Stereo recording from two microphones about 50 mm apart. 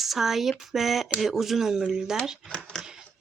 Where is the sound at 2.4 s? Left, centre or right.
Centre.